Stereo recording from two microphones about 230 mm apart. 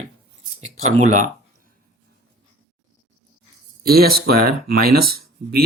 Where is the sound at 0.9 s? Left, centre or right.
Right.